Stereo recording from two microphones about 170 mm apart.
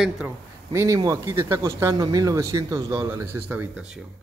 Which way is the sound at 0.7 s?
20° right (ahead or behind).